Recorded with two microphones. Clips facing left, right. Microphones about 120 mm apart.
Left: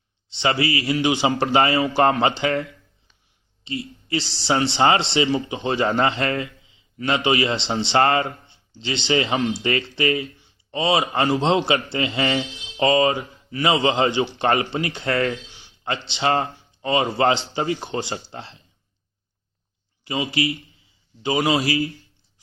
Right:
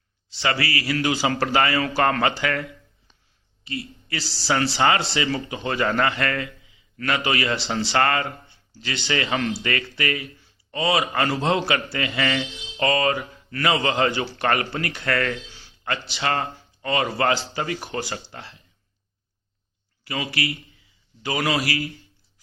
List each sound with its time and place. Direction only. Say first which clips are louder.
0.3 s speech: left 3 dB; 25° left (ahead or behind)
20.1 s a man's voice: left 4 dB; 20° left (ahead or behind)